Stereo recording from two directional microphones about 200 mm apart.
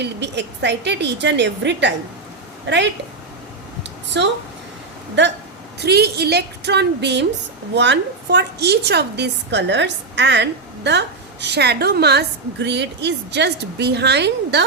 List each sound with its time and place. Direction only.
0.0 s a woman's voice: 60° right (ahead or behind)
4.1 s a woman's voice: 60° right (ahead or behind)